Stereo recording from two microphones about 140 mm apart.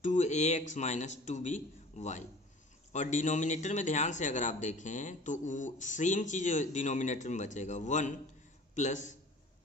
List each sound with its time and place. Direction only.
0.0 s a man's voice: 60° left (ahead or behind)